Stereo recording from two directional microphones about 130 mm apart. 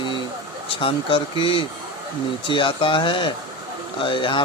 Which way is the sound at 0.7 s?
40° left (ahead or behind).